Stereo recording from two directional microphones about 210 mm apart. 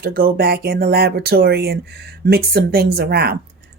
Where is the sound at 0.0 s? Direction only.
45° right (ahead or behind).